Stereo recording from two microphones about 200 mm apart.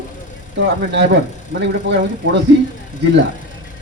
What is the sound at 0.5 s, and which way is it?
Speech, 65° right (ahead or behind).